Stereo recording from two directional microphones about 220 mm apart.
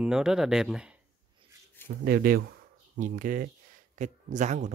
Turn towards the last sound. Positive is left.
turn(degrees=-30)  # may be behind; listen again after turning